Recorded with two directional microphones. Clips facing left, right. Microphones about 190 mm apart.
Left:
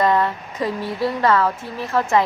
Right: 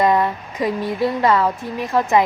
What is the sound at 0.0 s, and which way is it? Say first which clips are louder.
A woman's voice: right 1 dB; 15° right (ahead or behind).